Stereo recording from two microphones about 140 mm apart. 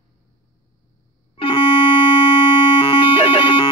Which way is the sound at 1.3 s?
40° left (ahead or behind).